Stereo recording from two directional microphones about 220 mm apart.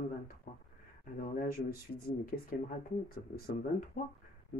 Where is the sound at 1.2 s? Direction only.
40° left (ahead or behind).